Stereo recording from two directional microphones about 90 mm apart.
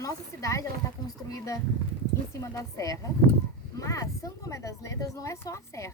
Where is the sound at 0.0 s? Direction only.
40° left (ahead or behind).